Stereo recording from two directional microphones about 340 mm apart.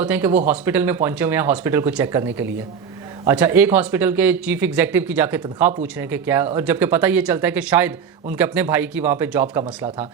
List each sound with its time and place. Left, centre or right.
0.0 s speech: centre